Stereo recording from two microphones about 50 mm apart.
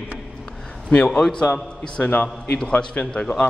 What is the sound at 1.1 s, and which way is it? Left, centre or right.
Speech, centre.